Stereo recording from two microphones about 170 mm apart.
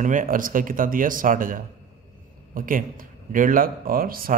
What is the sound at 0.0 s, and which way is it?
A man's voice, 50° right (ahead or behind).